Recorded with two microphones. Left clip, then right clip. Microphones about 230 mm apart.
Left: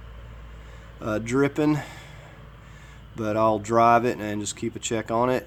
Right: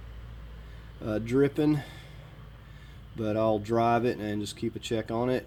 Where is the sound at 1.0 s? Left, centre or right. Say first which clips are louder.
Left 3 dB; centre.